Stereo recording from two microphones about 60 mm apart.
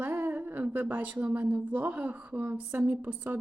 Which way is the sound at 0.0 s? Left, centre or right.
Right.